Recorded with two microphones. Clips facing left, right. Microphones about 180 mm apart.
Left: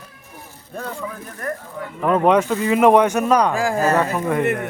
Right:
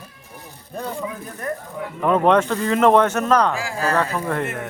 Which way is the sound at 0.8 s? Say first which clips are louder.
Right 1 dB; 15° right (ahead or behind).